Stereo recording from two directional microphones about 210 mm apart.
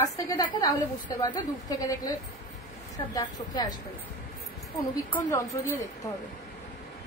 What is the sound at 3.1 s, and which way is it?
Speech, 20° left (ahead or behind).